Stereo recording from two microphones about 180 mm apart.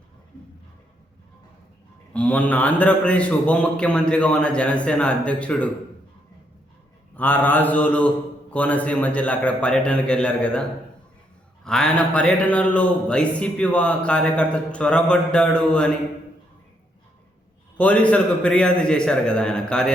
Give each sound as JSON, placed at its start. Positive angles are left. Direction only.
{"t": 2.1, "sound": "a man's voice", "side_deg": 5}
{"t": 7.2, "sound": "a man's voice", "side_deg": 10}
{"t": 17.7, "sound": "a man's voice", "side_deg": 5}